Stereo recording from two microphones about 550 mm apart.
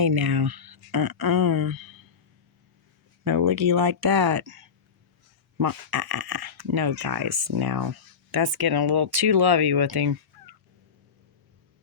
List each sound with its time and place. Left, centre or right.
0.0 s speech: right
3.2 s fowl: right
7.4 s speech: right
8.5 s fowl: right